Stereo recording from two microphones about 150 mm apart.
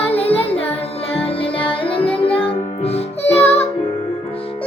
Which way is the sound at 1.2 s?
40° left (ahead or behind).